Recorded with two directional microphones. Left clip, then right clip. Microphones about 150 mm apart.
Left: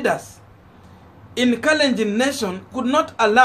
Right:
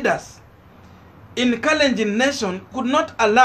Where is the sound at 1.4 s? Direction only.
Centre (ahead or behind).